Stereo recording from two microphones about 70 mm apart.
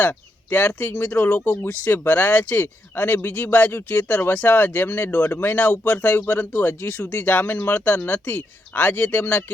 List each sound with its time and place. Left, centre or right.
0.0 s speech: left